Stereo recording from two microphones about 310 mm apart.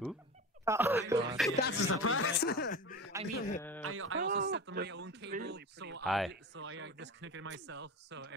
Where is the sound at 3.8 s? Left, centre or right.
Right.